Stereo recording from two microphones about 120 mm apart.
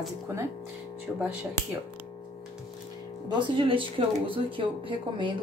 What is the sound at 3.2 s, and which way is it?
Speech, 40° right (ahead or behind).